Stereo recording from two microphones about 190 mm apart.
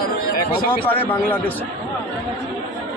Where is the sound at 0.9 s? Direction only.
10° left (ahead or behind).